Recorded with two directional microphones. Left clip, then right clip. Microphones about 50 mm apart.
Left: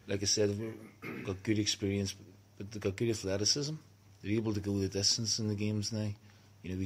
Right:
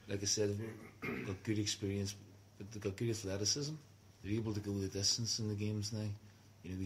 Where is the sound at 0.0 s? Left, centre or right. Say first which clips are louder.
Left 6 dB; left.